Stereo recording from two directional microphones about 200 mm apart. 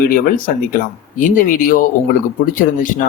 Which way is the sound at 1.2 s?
40° left (ahead or behind).